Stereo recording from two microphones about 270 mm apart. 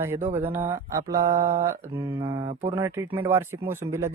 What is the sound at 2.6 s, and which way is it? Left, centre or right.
Speech, centre.